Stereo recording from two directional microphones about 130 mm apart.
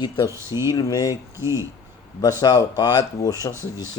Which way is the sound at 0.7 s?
30° left (ahead or behind).